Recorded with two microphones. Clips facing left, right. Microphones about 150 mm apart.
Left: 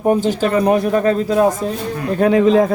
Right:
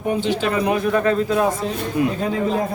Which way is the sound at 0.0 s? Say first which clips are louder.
Left 5 dB; 45° left (ahead or behind).